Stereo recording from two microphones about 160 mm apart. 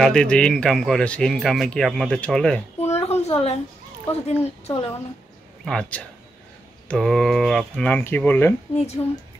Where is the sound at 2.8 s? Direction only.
40° left (ahead or behind).